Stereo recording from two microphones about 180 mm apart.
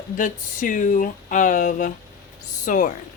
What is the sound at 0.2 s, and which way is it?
Speech, 45° left (ahead or behind).